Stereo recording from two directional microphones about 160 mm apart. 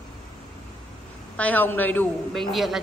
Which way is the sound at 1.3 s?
10° left (ahead or behind).